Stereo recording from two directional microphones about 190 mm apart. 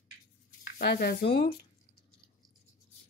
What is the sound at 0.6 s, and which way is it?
Speech, 55° left (ahead or behind).